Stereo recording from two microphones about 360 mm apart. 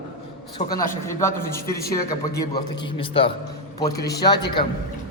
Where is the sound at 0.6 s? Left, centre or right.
Left.